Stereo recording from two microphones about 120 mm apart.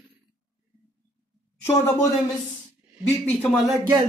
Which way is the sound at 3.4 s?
5° left (ahead or behind).